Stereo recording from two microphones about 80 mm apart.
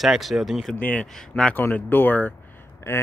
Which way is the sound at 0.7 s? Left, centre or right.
Left.